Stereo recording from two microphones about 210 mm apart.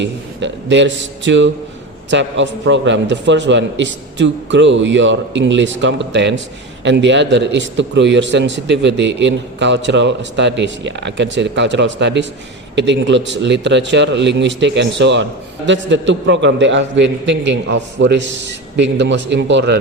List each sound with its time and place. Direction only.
0.0 s a man's voice: 60° right (ahead or behind)